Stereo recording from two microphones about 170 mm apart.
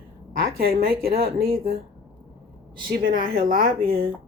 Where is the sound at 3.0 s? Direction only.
55° right (ahead or behind).